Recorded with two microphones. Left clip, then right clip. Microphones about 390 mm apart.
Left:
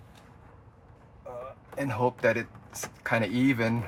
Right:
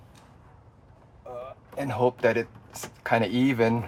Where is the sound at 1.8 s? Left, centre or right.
Centre.